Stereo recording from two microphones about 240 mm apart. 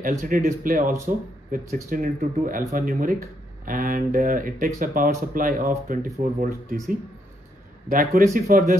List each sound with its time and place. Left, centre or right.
0.3 s speech: right
7.9 s speech: right